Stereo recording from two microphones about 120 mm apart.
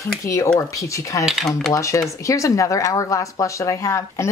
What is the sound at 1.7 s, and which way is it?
Speech, 25° left (ahead or behind).